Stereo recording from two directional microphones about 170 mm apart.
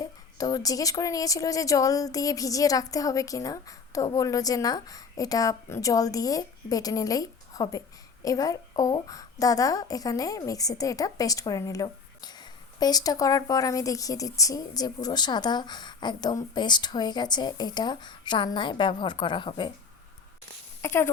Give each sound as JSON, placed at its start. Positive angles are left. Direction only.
{"t": 0.0, "sound": "a woman's voice", "side_deg": 20}
{"t": 20.8, "sound": "speech", "side_deg": 15}